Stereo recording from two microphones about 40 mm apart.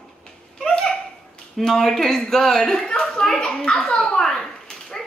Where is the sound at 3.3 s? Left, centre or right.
Left.